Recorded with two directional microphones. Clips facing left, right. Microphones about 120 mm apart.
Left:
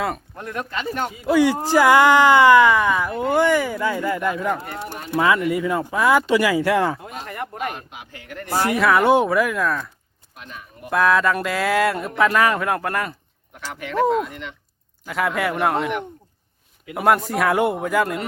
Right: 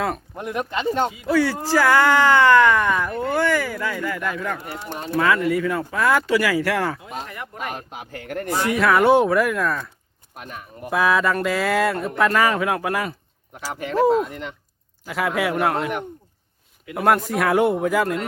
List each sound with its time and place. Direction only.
0.3 s speech: 15° right (ahead or behind)
1.3 s speech: 15° left (ahead or behind)
7.3 s speech: 45° left (ahead or behind)
7.7 s speech: 40° right (ahead or behind)
8.7 s speech: centre (ahead or behind)
10.3 s speech: 50° right (ahead or behind)
10.8 s speech: centre (ahead or behind)
13.7 s speech: 35° right (ahead or behind)
15.0 s speech: centre (ahead or behind)
16.9 s speech: 5° left (ahead or behind)